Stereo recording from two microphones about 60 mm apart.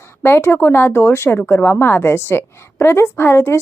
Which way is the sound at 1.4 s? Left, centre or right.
Left.